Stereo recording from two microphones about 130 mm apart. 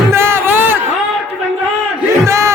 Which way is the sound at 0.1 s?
20° right (ahead or behind).